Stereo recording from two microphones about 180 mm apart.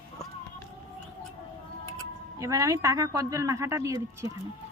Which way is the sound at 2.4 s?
20° right (ahead or behind).